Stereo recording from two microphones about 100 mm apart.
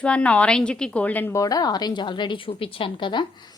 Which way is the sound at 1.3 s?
35° left (ahead or behind).